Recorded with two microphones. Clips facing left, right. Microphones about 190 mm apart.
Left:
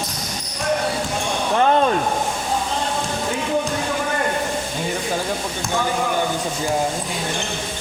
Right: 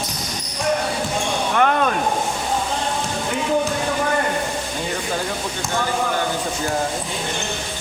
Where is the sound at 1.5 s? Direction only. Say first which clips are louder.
Left 2 dB; 30° left (ahead or behind).